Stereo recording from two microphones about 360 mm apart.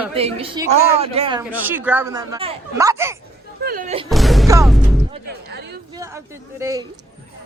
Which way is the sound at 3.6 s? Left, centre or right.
Right.